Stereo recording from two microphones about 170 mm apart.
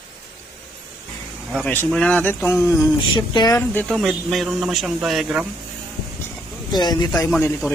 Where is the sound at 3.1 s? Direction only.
25° left (ahead or behind).